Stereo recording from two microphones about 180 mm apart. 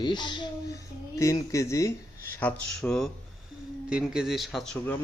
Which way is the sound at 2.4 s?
5° left (ahead or behind).